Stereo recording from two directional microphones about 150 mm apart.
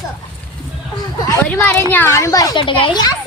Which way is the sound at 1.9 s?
15° left (ahead or behind).